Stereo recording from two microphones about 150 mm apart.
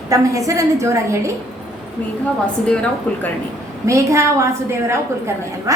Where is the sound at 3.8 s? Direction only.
20° right (ahead or behind).